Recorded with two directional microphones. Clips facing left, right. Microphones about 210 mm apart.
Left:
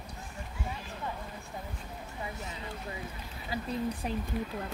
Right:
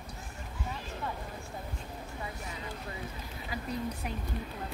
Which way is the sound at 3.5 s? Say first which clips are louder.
Left 3 dB; 30° left (ahead or behind).